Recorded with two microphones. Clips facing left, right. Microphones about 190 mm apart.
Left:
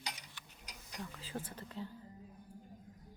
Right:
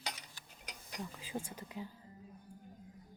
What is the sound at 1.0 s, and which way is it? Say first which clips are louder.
Speech: right 2 dB; 15° right (ahead or behind).